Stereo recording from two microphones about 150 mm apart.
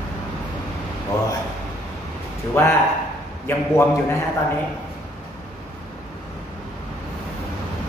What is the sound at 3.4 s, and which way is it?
Speech, 20° left (ahead or behind).